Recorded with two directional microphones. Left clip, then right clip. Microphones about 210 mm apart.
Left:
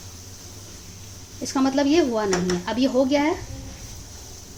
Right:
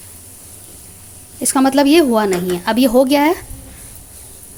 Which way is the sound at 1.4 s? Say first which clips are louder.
Right 9 dB; 45° right (ahead or behind).